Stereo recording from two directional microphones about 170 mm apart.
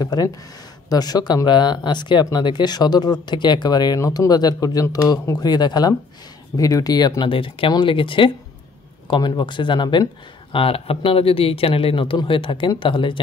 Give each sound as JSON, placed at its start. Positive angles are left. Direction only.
{"t": 0.0, "sound": "speech", "side_deg": 20}